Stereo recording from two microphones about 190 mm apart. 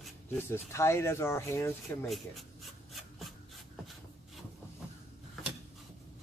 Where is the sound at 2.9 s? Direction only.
Centre (ahead or behind).